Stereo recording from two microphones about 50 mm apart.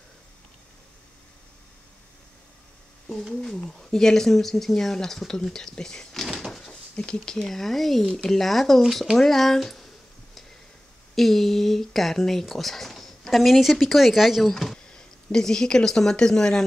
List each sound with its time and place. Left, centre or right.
3.4 s speech: centre
6.2 s door: centre
6.7 s a sound: centre
7.4 s speech: centre
11.1 s speech: centre
14.9 s speech: centre